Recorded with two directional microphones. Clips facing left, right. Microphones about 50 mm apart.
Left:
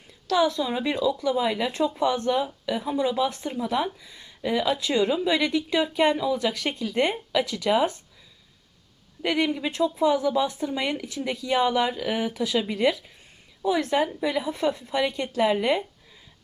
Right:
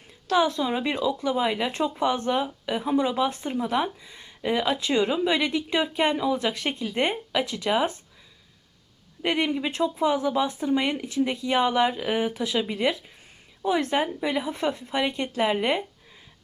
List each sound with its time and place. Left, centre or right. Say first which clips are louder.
0.3 s speech: even; right
9.2 s speech: even; right
12.4 s speech: left 2 dB; centre
13.7 s speech: left 1 dB; right